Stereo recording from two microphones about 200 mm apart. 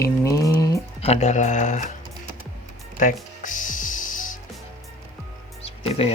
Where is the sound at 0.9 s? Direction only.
30° left (ahead or behind).